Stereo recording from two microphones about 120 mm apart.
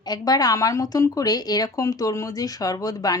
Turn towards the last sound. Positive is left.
turn(degrees=30)  # may be behind; listen again after turning